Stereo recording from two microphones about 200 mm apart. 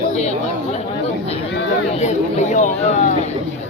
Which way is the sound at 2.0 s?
35° left (ahead or behind).